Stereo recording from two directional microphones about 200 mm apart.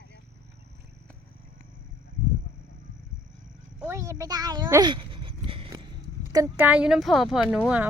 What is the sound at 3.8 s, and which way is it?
Speech, 15° right (ahead or behind).